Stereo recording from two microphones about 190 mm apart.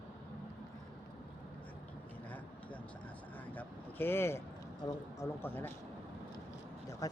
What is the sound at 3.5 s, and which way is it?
Vehicle, 10° left (ahead or behind).